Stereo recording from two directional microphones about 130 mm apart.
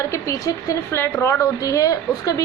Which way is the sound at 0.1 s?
25° left (ahead or behind).